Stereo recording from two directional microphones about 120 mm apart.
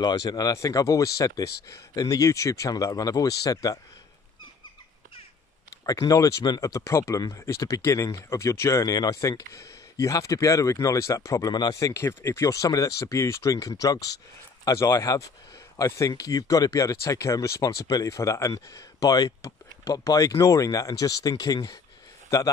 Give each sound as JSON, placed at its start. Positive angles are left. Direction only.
{"t": 0.0, "sound": "speech", "side_deg": 35}
{"t": 5.9, "sound": "speech", "side_deg": 30}
{"t": 11.9, "sound": "speech", "side_deg": 20}